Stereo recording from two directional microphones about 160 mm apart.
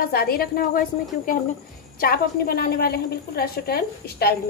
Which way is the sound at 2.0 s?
70° left (ahead or behind).